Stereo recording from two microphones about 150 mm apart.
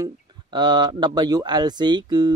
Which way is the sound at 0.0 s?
30° right (ahead or behind).